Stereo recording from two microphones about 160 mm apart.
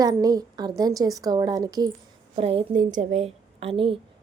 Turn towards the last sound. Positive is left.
turn(degrees=-35)  # may be behind; listen again after turning